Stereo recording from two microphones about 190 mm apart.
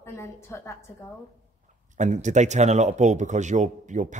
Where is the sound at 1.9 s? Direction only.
40° right (ahead or behind).